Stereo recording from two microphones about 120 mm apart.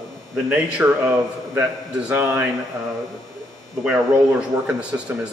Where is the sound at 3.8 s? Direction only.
10° right (ahead or behind).